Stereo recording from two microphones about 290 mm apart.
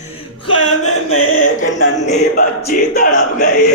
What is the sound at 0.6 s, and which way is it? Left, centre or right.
Music, left.